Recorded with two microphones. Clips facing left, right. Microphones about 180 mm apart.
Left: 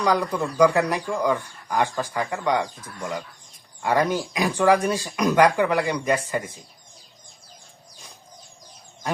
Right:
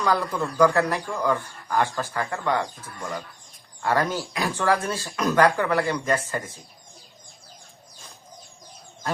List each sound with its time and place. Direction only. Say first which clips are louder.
0.0 s speech: left 2 dB; 15° left (ahead or behind)